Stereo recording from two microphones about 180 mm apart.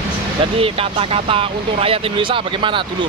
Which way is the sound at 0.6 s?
30° right (ahead or behind).